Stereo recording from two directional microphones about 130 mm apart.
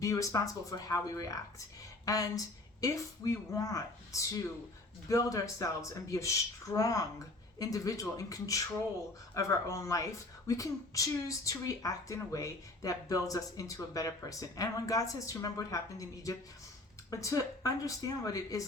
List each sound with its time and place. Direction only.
0.0 s speech: 25° left (ahead or behind)